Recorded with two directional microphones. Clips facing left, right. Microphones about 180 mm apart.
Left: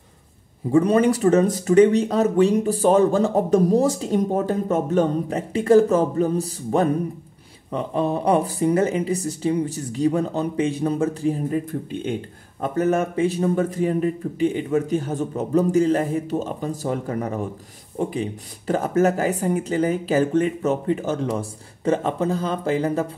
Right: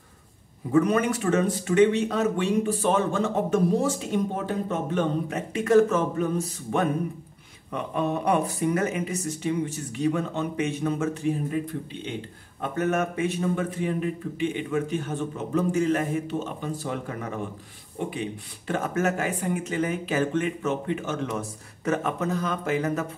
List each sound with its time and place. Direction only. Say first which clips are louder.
0.7 s speech: left 5 dB; 30° left (ahead or behind)
11.9 s speech: left 8 dB; 50° left (ahead or behind)
12.6 s speech: left 5 dB; 35° left (ahead or behind)